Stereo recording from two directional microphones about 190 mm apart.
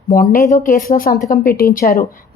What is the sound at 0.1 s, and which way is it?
Speech, 50° left (ahead or behind).